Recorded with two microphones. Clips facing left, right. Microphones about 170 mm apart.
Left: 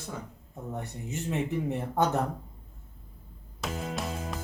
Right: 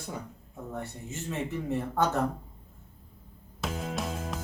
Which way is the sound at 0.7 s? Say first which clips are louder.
Left 2 dB; 20° left (ahead or behind).